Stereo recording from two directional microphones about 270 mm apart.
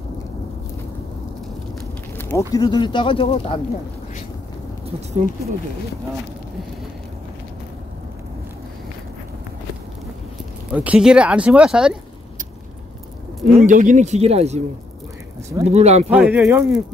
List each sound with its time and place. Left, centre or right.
2.1 s a sound: centre
2.5 s speech: centre
10.7 s speech: centre
13.6 s speech: right
16.1 s speech: centre